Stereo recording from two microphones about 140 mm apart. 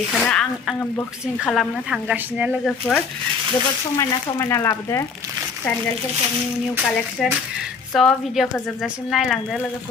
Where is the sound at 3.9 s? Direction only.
25° left (ahead or behind).